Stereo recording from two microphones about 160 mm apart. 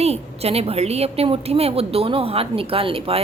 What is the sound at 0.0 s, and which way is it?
A woman's voice, 40° right (ahead or behind).